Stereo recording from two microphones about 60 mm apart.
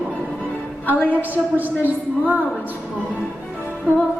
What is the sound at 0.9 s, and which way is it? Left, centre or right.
Speech, left.